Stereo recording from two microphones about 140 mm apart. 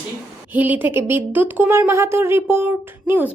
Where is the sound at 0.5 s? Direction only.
10° right (ahead or behind).